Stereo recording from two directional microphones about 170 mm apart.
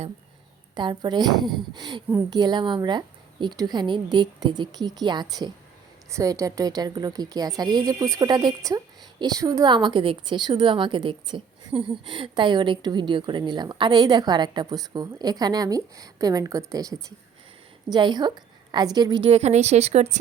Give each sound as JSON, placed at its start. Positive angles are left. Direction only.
{"t": 0.8, "sound": "a woman's voice", "side_deg": -25}
{"t": 17.9, "sound": "a woman's voice", "side_deg": -25}